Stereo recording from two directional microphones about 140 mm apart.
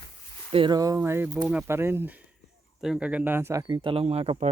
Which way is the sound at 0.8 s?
20° right (ahead or behind).